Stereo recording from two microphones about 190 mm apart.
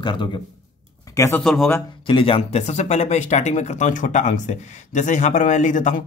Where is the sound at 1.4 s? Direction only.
Centre (ahead or behind).